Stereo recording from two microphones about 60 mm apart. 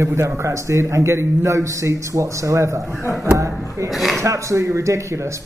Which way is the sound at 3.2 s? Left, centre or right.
Right.